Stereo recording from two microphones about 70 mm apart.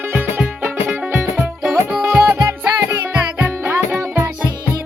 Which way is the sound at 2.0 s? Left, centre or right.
Right.